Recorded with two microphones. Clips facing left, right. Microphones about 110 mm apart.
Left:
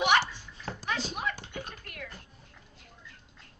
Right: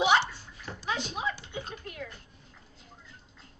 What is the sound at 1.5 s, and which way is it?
Dog, 25° right (ahead or behind).